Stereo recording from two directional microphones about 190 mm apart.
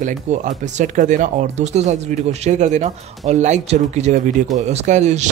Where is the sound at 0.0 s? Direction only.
40° right (ahead or behind).